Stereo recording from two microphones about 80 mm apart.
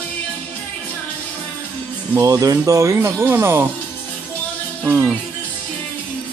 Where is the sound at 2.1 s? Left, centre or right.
Right.